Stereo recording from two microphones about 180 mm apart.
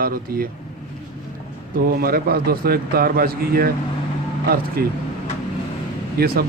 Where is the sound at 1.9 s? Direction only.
55° right (ahead or behind).